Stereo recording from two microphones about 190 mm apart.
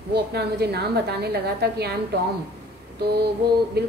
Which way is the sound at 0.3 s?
60° right (ahead or behind).